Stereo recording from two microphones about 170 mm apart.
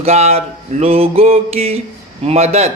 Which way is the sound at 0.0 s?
40° right (ahead or behind).